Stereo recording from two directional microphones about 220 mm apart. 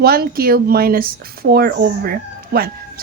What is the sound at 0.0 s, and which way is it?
A woman's voice, 45° right (ahead or behind).